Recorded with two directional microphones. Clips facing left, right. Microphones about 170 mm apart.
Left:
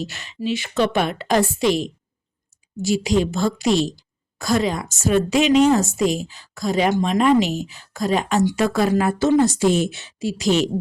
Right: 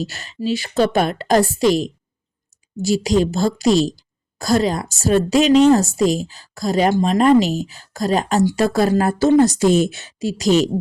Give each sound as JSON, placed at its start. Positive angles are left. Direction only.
{"t": 0.0, "sound": "speech", "side_deg": -40}